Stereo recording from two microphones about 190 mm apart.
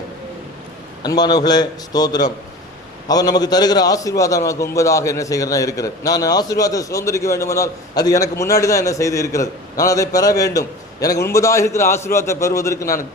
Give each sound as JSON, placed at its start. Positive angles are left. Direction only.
{"t": 1.0, "sound": "a man's voice", "side_deg": 20}